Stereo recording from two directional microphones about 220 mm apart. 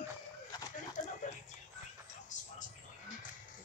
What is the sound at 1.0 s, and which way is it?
Music, 35° left (ahead or behind).